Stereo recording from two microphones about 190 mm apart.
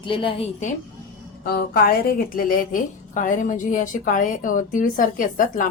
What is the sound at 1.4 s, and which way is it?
A woman's voice, 50° left (ahead or behind).